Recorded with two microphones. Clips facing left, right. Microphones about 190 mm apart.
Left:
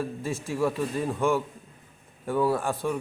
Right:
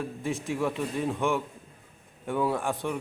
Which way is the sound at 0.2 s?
15° right (ahead or behind).